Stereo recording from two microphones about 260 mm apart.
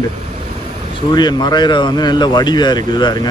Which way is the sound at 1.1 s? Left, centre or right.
Centre.